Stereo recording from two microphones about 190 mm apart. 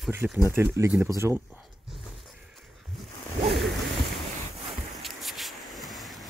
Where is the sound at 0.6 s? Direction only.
10° right (ahead or behind).